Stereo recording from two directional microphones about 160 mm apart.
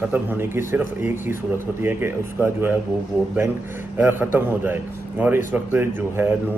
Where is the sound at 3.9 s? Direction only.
10° right (ahead or behind).